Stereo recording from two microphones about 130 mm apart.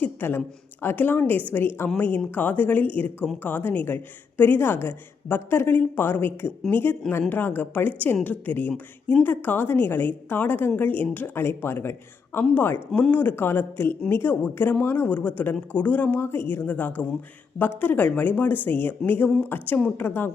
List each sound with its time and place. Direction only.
0.0 s a woman's voice: 15° left (ahead or behind)